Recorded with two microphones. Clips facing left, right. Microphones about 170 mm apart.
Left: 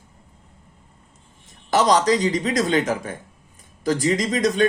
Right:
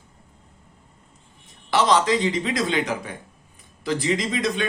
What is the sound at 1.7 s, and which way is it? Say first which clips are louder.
A man's voice: left 2 dB; 40° left (ahead or behind).